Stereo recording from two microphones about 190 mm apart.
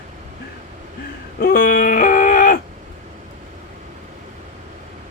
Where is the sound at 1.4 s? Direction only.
50° left (ahead or behind).